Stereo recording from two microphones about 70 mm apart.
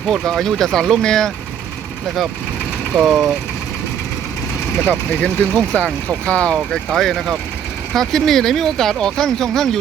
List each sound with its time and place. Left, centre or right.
0.1 s speech: centre
2.9 s speech: centre
4.9 s speech: left